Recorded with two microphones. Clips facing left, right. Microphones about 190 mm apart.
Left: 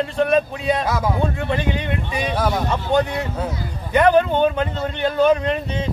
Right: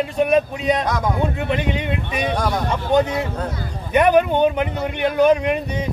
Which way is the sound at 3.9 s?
15° right (ahead or behind).